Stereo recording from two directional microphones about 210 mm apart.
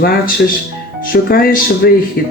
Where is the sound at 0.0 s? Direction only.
45° left (ahead or behind).